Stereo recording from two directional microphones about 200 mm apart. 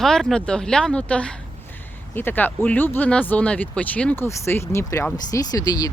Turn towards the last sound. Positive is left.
turn(degrees=20)  # may be behind; listen again after turning